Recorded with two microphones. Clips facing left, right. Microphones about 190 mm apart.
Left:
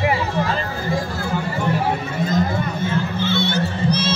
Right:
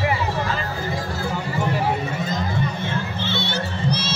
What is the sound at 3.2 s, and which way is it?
Music, 50° left (ahead or behind).